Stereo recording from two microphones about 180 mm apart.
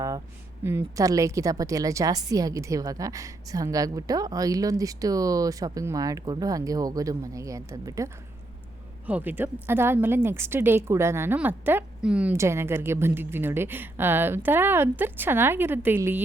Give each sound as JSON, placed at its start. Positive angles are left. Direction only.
{"t": 0.6, "sound": "a woman's voice", "side_deg": -10}